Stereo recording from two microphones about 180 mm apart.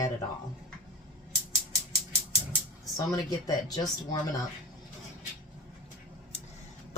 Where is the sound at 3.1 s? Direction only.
20° left (ahead or behind).